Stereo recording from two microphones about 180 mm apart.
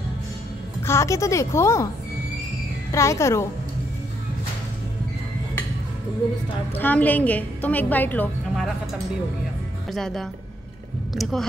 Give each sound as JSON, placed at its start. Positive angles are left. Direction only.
{"t": 0.8, "sound": "a woman's voice", "side_deg": 15}
{"t": 2.9, "sound": "a woman's voice", "side_deg": 15}
{"t": 6.8, "sound": "a woman's voice", "side_deg": 10}
{"t": 9.8, "sound": "speech", "side_deg": 0}